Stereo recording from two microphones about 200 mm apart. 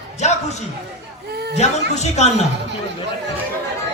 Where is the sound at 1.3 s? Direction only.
55° right (ahead or behind).